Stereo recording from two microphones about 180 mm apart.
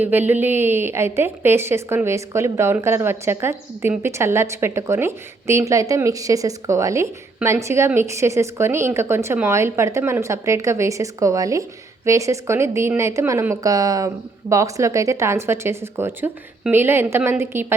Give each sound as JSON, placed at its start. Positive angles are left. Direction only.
{"t": 0.0, "sound": "a woman's voice", "side_deg": -10}